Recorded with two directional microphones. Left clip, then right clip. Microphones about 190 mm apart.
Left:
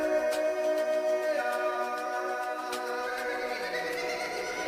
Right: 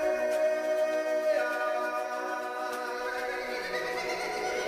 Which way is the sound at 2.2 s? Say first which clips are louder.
Left 1 dB; centre (ahead or behind).